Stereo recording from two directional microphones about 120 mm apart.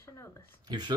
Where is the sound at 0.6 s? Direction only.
35° right (ahead or behind).